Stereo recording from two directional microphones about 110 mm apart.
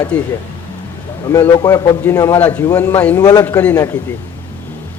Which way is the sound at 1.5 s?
35° left (ahead or behind).